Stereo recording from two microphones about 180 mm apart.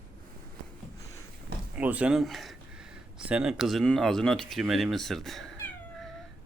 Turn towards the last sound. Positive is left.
turn(degrees=0)  # may be behind; listen again after turning